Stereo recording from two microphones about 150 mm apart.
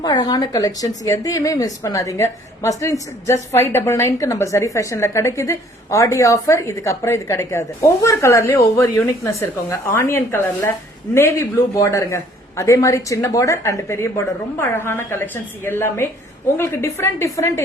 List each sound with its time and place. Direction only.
0.0 s a woman's voice: 30° left (ahead or behind)